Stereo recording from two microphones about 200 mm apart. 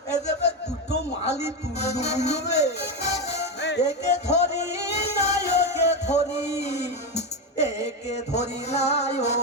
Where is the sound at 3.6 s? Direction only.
55° left (ahead or behind).